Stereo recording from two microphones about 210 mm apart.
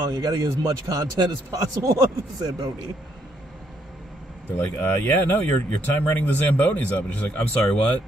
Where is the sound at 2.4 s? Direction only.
20° right (ahead or behind).